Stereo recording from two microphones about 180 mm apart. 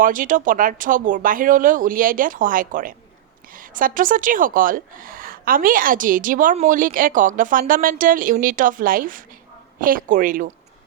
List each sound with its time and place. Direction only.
0.0 s speech: 50° right (ahead or behind)